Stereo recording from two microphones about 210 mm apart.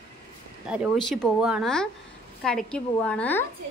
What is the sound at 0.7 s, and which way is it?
A woman's voice, 5° right (ahead or behind).